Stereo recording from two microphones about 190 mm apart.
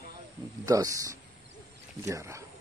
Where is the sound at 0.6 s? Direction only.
15° right (ahead or behind).